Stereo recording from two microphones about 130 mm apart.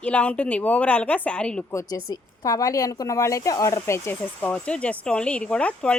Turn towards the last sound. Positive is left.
turn(degrees=10)  # may be behind; listen again after turning